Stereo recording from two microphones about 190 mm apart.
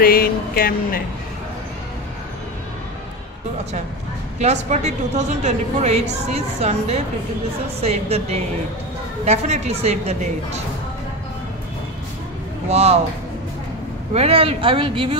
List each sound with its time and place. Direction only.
0.0 s speech: 50° left (ahead or behind)
4.4 s a woman's voice: 35° right (ahead or behind)
12.6 s a woman's voice: 35° right (ahead or behind)
14.1 s speech: 30° right (ahead or behind)